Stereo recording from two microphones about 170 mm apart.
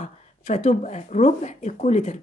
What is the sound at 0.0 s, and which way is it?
A woman's voice, 45° left (ahead or behind).